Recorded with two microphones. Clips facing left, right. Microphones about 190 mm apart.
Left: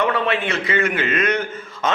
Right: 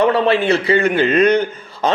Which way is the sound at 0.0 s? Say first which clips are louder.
Right 6 dB; 35° right (ahead or behind).